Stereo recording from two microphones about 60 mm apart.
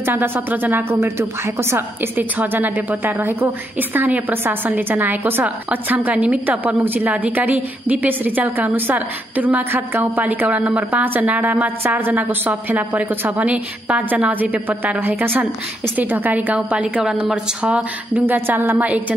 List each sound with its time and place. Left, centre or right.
0.0 s a woman's voice: right
0.9 s a woman's voice: right
2.1 s a woman's voice: right
18.2 s a woman's voice: right